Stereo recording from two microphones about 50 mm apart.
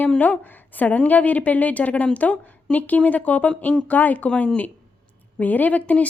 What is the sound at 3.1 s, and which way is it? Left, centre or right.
A woman's voice, left.